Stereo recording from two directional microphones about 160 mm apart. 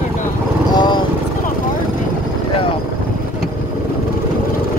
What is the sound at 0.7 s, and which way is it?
Vehicle, 25° left (ahead or behind).